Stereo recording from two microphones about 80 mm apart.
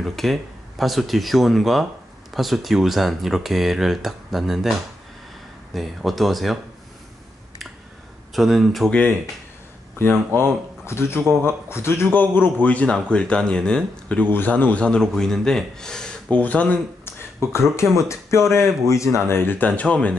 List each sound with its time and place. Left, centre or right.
0.0 s speech: centre
8.4 s speech: centre
9.9 s speech: left
17.5 s speech: left; by 20.2 s centre